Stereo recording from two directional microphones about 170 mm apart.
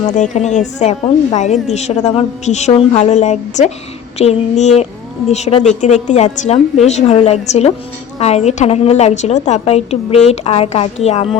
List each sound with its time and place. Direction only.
0.0 s a woman's voice: 45° left (ahead or behind)